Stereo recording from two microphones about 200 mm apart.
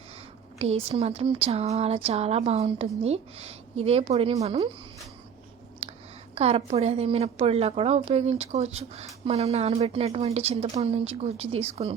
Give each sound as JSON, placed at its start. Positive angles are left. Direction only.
{"t": 0.6, "sound": "speech", "side_deg": -30}
{"t": 6.3, "sound": "a woman's voice", "side_deg": -30}